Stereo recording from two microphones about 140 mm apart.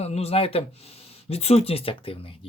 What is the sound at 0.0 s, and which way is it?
Speech, 45° left (ahead or behind).